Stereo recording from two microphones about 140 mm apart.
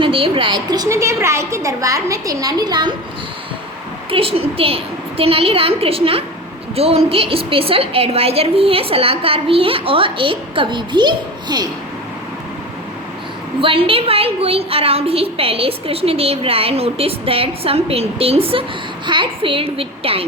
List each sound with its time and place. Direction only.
0.0 s a woman's voice: 40° right (ahead or behind)
4.1 s a woman's voice: 45° right (ahead or behind)
13.6 s a woman's voice: 40° right (ahead or behind)